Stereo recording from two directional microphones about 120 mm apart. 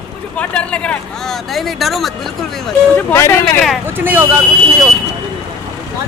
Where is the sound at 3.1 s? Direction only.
20° left (ahead or behind).